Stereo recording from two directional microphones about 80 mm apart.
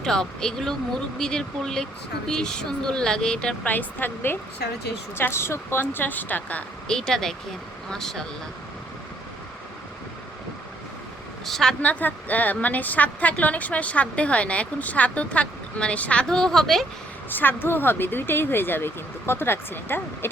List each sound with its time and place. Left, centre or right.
0.0 s a woman's voice: centre
3.7 s speech: left
6.9 s a woman's voice: centre
11.4 s speech: centre
11.8 s a woman's voice: left; by 16.8 s centre
17.2 s speech: left